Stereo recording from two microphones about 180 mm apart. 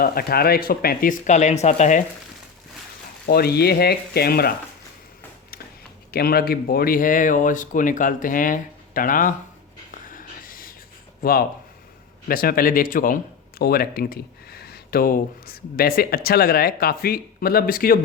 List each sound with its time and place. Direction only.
0.0 s speech: 55° left (ahead or behind)
3.2 s speech: 60° left (ahead or behind)
6.1 s speech: 60° left (ahead or behind)
10.1 s a sound: 50° left (ahead or behind)
11.2 s speech: 55° left (ahead or behind)